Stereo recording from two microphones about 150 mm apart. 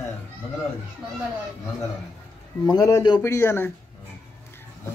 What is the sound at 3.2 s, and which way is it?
Speech, 15° left (ahead or behind).